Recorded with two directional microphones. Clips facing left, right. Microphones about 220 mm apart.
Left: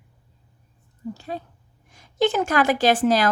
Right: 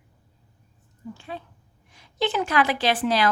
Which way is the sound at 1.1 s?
40° left (ahead or behind).